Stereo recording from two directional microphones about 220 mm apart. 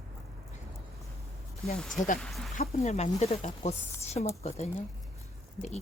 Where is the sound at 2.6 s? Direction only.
30° left (ahead or behind).